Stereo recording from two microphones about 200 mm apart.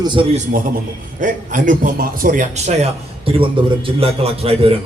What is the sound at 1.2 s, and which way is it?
A man's voice, 40° right (ahead or behind).